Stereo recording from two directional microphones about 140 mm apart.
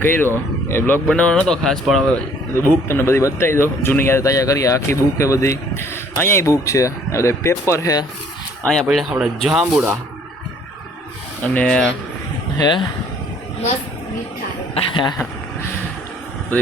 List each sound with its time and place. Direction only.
0.7 s speech: 20° left (ahead or behind)
1.0 s speech: 5° left (ahead or behind)
2.6 s speech: 15° left (ahead or behind)
8.6 s speech: 5° left (ahead or behind)
11.4 s speech: 10° left (ahead or behind)
12.5 s speech: 30° left (ahead or behind)
14.8 s speech: 35° left (ahead or behind)